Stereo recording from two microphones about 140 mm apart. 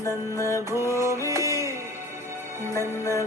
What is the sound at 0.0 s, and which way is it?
Music, 25° left (ahead or behind).